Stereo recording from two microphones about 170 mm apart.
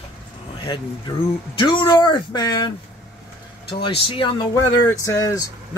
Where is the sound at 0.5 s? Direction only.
30° left (ahead or behind).